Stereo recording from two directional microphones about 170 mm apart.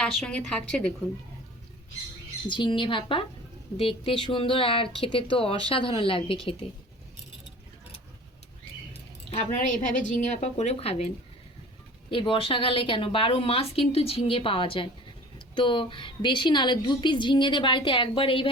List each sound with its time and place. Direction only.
0.0 s a woman's voice: 5° left (ahead or behind)
2.5 s a woman's voice: 30° left (ahead or behind)
8.9 s speech: 45° left (ahead or behind)
12.1 s a woman's voice: 30° left (ahead or behind)